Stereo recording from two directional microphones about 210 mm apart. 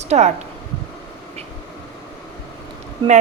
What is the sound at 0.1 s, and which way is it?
Speech, 35° right (ahead or behind).